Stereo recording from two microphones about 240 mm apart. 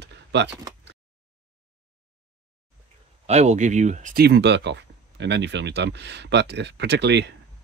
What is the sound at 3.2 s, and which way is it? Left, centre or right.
Speech, right.